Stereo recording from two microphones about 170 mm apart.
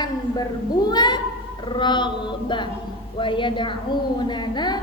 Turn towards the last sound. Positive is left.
turn(degrees=25)  # may be behind; listen again after turning